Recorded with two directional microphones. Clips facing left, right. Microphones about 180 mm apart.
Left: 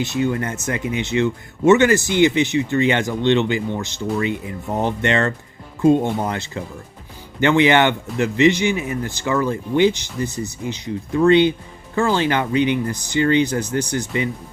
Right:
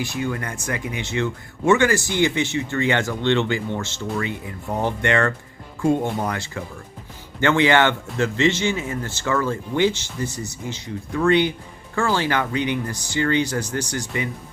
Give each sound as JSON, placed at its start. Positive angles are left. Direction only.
{"t": 0.0, "sound": "a man's voice", "side_deg": 20}